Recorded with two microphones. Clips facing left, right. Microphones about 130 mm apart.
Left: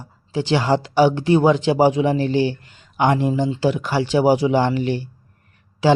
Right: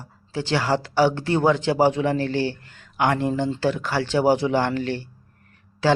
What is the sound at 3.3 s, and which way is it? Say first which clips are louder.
Speech: left 3 dB; 10° left (ahead or behind).